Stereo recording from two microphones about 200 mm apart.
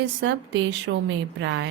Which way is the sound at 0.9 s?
70° right (ahead or behind).